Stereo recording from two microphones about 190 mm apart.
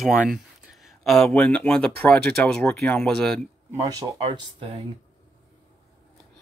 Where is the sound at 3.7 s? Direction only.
20° right (ahead or behind).